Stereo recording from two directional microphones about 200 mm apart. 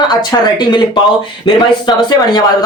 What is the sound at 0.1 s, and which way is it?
Speech, 20° left (ahead or behind).